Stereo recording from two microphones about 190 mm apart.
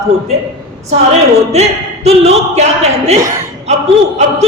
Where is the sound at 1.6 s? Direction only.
35° right (ahead or behind).